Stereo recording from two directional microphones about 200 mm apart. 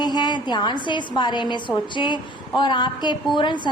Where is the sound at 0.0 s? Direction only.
20° left (ahead or behind).